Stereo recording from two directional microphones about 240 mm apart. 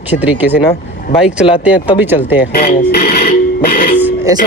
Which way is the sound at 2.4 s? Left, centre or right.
Left.